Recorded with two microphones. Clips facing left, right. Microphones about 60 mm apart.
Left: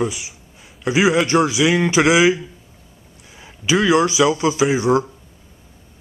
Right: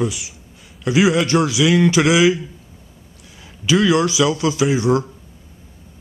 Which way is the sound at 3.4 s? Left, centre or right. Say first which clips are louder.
Right 1 dB; centre.